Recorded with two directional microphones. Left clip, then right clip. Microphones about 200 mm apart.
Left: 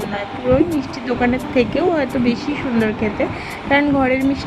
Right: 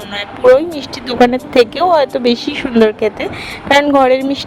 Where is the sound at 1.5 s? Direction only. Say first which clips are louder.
Right 7 dB; 40° right (ahead or behind).